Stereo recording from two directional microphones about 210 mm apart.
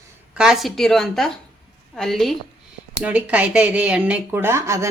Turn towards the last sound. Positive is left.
turn(degrees=-15)  # may be behind; listen again after turning